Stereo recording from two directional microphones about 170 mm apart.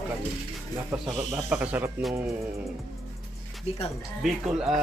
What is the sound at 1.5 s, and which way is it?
Speech, 5° right (ahead or behind).